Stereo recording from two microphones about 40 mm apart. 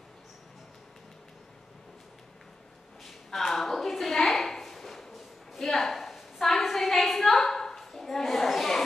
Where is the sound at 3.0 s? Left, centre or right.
Centre.